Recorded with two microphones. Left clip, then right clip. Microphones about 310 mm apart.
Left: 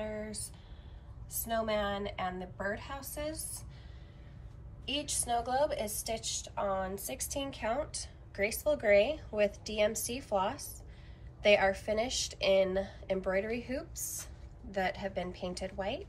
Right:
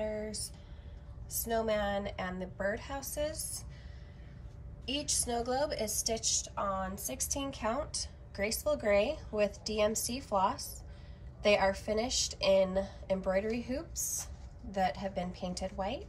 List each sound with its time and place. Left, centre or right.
0.1 s a sound: centre
1.3 s a woman's voice: centre
4.8 s a woman's voice: centre